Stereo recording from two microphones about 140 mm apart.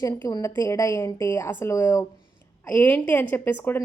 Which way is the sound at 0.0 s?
25° left (ahead or behind).